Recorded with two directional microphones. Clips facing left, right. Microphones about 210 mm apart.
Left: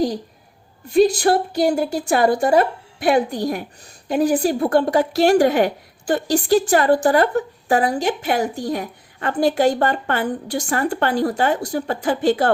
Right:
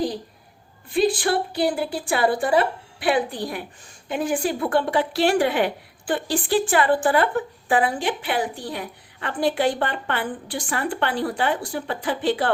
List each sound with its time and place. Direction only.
0.9 s a woman's voice: 40° left (ahead or behind)